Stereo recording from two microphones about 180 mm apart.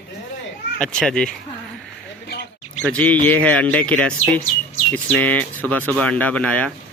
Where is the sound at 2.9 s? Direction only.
5° left (ahead or behind).